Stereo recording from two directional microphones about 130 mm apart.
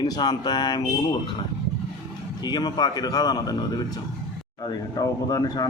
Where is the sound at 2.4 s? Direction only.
35° left (ahead or behind).